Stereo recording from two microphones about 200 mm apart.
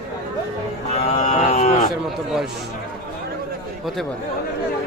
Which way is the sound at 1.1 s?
35° left (ahead or behind).